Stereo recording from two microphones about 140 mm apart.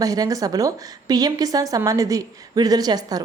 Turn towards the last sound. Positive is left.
turn(degrees=-30)  # may be behind; listen again after turning